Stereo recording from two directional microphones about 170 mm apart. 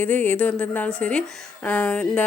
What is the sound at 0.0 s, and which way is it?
Speech, 10° left (ahead or behind).